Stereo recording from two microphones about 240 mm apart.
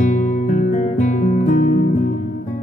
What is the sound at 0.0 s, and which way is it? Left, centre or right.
Music, left.